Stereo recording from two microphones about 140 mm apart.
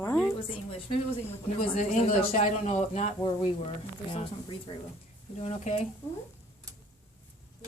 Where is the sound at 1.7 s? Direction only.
55° left (ahead or behind).